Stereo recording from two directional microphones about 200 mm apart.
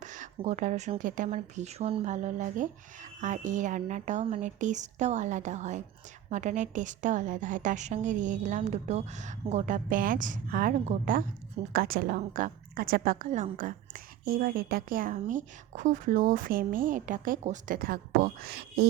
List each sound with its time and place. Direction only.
0.0 s a woman's voice: 40° right (ahead or behind)